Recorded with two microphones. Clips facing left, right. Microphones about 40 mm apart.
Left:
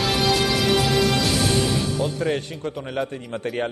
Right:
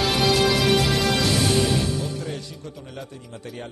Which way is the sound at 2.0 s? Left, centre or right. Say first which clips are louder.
Left 6 dB; left.